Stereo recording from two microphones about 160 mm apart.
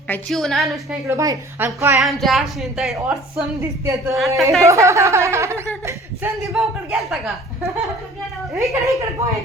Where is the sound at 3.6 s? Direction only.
20° right (ahead or behind).